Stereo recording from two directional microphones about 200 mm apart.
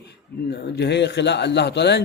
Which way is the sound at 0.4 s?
60° left (ahead or behind).